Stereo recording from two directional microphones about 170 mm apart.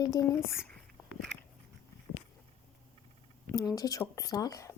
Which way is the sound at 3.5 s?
20° left (ahead or behind).